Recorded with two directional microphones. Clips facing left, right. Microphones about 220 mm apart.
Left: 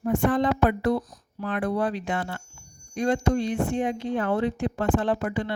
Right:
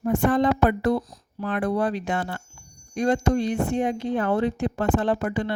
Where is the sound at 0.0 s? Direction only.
40° right (ahead or behind).